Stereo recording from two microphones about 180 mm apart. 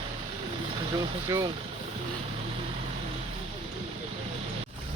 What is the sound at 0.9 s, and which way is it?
Speech, 20° right (ahead or behind).